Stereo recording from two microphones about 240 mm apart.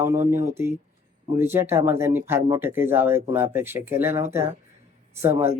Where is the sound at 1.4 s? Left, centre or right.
Centre.